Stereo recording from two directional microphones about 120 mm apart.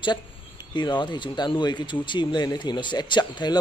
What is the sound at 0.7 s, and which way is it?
Speech, 40° left (ahead or behind).